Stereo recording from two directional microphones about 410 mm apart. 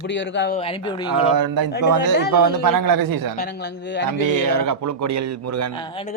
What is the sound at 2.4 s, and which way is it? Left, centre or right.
Speech, right.